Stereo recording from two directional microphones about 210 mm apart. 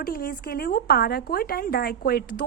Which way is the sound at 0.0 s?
45° left (ahead or behind).